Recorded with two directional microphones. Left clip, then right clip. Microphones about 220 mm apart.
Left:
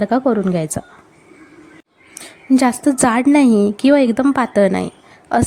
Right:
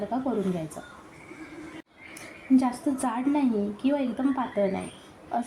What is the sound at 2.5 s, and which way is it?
A woman's voice, 45° left (ahead or behind).